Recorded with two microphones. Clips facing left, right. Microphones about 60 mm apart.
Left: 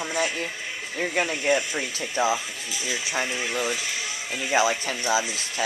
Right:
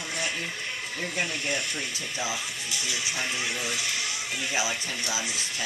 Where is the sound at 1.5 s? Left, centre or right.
Left.